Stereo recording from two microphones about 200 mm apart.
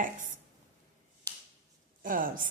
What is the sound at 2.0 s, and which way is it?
Speech, 45° right (ahead or behind).